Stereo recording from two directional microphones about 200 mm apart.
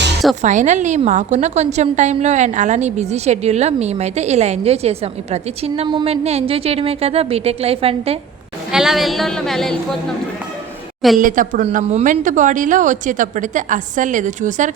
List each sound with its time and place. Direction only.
0.4 s a woman's voice: 35° right (ahead or behind)
8.7 s a woman's voice: centre (ahead or behind)
11.2 s a woman's voice: 40° right (ahead or behind)